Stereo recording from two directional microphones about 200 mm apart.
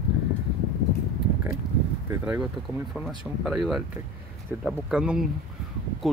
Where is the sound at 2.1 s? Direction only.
5° right (ahead or behind).